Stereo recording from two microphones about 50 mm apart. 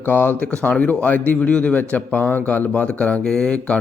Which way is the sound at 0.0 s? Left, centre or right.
Left.